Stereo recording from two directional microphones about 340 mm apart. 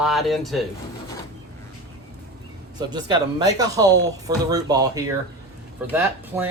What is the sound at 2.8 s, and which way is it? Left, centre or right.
Speech, centre.